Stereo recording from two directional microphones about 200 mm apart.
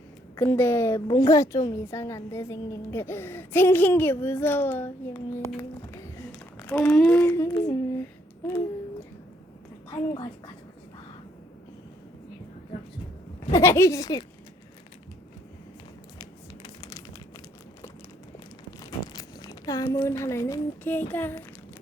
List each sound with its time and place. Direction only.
0.3 s a woman's voice: 15° left (ahead or behind)
9.9 s a woman's voice: 20° left (ahead or behind)
13.5 s a woman's voice: 15° left (ahead or behind)
16.6 s crumpling: 20° left (ahead or behind)
18.8 s speech: 20° left (ahead or behind)